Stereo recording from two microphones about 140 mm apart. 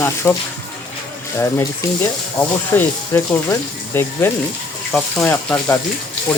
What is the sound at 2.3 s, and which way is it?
Speech, 15° left (ahead or behind).